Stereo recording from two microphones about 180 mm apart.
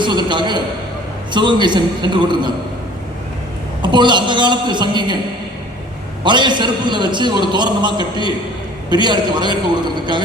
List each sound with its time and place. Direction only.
0.0 s a sound: 25° right (ahead or behind)
1.3 s a man's voice: 25° right (ahead or behind)
3.8 s a man's voice: 25° right (ahead or behind)
6.2 s a man's voice: 25° right (ahead or behind)